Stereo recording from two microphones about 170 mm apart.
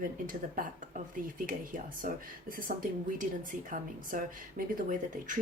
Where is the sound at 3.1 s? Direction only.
50° right (ahead or behind).